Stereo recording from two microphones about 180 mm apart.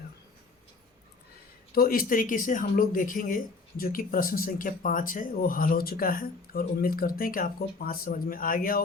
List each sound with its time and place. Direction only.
1.7 s speech: 55° left (ahead or behind)